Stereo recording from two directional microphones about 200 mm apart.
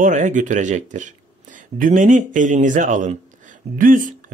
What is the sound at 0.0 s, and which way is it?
Speech, 40° right (ahead or behind).